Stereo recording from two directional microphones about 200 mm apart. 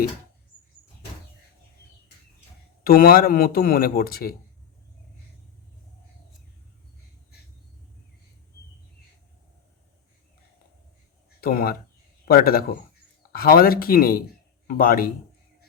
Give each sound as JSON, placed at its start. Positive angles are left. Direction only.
{"t": 2.8, "sound": "speech", "side_deg": 50}
{"t": 11.3, "sound": "speech", "side_deg": 50}